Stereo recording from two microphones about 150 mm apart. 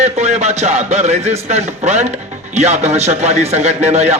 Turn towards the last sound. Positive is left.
turn(degrees=-45)  # may be behind; listen again after turning